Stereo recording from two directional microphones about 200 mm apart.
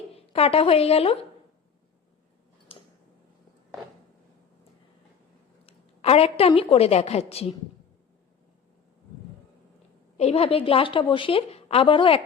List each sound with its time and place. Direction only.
0.3 s a woman's voice: 30° left (ahead or behind)
5.6 s a woman's voice: 30° left (ahead or behind)
10.2 s a woman's voice: 30° left (ahead or behind)